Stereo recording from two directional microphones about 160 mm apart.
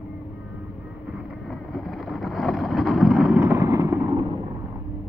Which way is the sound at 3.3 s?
15° right (ahead or behind).